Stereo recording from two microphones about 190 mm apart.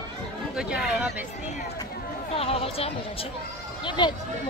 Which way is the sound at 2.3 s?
30° left (ahead or behind).